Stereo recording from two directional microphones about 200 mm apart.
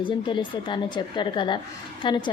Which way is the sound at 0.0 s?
25° left (ahead or behind).